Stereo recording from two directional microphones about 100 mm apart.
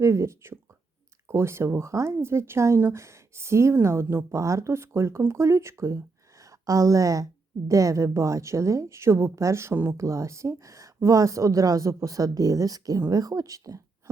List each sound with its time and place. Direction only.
0.0 s a woman's voice: 30° right (ahead or behind)